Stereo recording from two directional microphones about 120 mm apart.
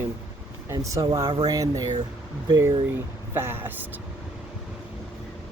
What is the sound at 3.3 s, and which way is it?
Speech, 20° right (ahead or behind).